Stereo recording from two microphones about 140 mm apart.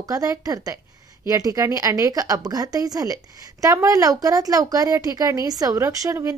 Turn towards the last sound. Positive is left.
turn(degrees=-20)  # may be behind; listen again after turning